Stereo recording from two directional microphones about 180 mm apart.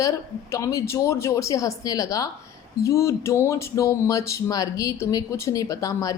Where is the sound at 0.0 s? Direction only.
15° left (ahead or behind).